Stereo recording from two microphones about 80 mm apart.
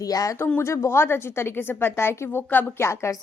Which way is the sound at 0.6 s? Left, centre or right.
Left.